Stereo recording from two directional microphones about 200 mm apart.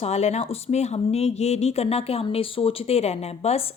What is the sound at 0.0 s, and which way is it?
Speech, 35° left (ahead or behind).